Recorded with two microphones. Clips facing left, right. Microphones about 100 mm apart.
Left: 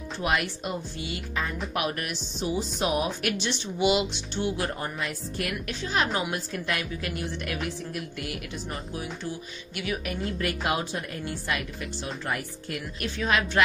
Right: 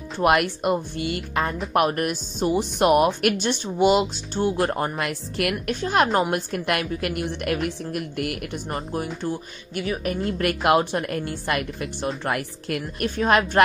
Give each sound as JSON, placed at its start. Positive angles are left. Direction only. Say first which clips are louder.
{"t": 0.2, "sound": "speech", "louder": "right 8 dB", "side_deg": -55}
{"t": 3.2, "sound": "speech", "louder": "right 7 dB", "side_deg": -55}
{"t": 8.7, "sound": "speech", "louder": "right 9 dB", "side_deg": -45}
{"t": 10.4, "sound": "speech", "louder": "right 10 dB", "side_deg": -65}
{"t": 12.3, "sound": "speech", "louder": "right 6 dB", "side_deg": -70}